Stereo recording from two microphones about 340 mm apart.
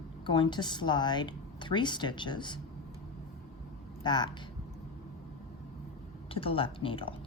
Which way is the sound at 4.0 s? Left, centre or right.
Centre.